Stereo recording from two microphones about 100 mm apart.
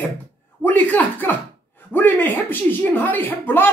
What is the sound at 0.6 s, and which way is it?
Speech, 15° left (ahead or behind).